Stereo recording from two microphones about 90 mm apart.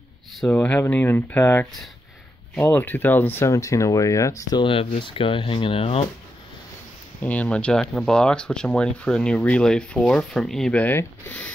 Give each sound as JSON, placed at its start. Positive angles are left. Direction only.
{"t": 0.5, "sound": "speech", "side_deg": 20}
{"t": 3.4, "sound": "speech", "side_deg": 35}
{"t": 4.6, "sound": "speech", "side_deg": 85}
{"t": 7.2, "sound": "speech", "side_deg": 15}
{"t": 10.7, "sound": "speech", "side_deg": 20}